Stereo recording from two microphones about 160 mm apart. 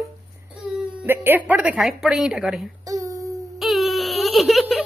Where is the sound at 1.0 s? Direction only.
15° right (ahead or behind).